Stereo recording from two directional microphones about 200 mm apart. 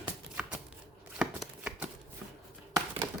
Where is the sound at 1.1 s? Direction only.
5° right (ahead or behind).